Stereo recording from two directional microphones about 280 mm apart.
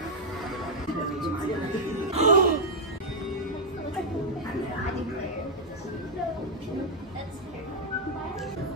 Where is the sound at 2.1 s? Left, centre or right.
Right.